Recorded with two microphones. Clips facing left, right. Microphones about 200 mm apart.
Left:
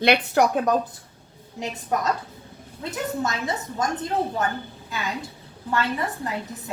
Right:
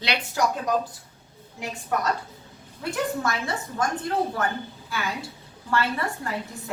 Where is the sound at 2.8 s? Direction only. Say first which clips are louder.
Right 1 dB; 20° left (ahead or behind).